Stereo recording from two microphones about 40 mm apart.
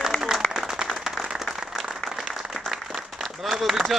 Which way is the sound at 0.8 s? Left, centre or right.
Right.